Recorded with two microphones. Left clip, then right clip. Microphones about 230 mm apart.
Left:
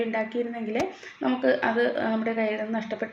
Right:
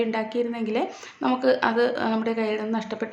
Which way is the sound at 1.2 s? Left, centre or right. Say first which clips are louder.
Right 2 dB; centre.